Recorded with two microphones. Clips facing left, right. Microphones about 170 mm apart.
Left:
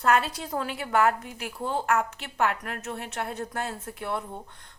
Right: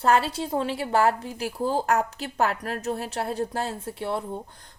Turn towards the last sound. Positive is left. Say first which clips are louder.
# right 5 dB
turn(degrees=-35)  # may be behind; listen again after turning